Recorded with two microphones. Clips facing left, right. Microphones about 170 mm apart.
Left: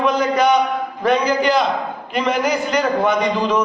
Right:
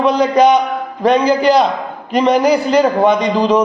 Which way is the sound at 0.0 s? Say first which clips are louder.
Right 5 dB; 35° right (ahead or behind).